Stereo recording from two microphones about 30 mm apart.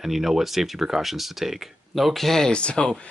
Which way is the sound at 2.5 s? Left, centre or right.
Left.